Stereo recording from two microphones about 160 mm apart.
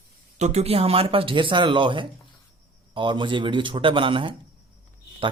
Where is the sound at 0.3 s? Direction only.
45° right (ahead or behind).